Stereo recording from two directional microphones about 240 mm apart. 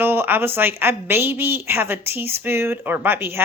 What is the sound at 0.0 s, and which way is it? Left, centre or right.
A woman's voice, centre.